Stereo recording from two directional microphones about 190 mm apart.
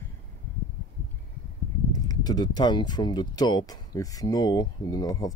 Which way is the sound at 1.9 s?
20° left (ahead or behind).